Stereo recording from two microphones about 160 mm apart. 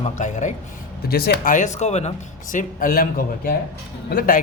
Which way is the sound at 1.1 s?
75° left (ahead or behind).